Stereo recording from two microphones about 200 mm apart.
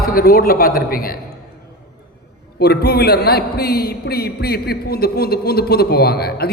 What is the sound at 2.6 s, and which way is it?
A man's voice, 55° left (ahead or behind).